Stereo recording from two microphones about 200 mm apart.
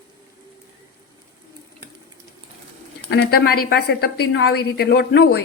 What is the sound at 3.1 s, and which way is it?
A woman's voice, 55° left (ahead or behind).